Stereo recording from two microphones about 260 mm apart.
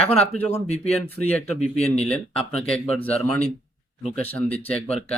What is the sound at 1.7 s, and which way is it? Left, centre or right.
Speech, left.